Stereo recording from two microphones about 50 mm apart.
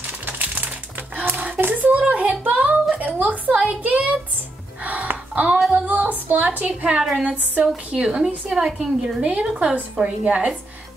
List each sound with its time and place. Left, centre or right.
0.0 s music: right
1.6 s a sound: right
3.0 s a woman's voice: right
4.8 s gasp: right
5.7 s a woman's voice: right